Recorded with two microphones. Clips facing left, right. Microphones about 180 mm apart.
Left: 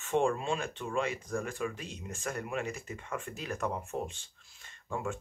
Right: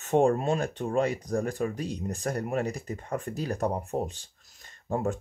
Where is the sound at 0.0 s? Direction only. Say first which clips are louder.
Right 6 dB; 40° right (ahead or behind).